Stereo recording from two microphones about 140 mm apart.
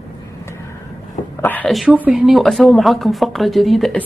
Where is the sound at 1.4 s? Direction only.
10° left (ahead or behind).